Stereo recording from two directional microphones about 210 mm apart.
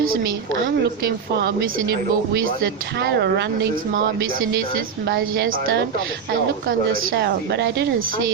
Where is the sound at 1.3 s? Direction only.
50° right (ahead or behind).